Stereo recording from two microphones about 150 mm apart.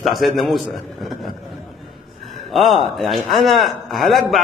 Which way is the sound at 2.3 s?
Centre (ahead or behind).